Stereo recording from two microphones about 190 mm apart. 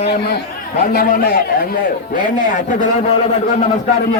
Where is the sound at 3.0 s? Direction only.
30° left (ahead or behind).